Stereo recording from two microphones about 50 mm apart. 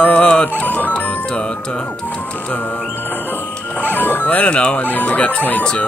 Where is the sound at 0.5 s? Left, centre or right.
Left.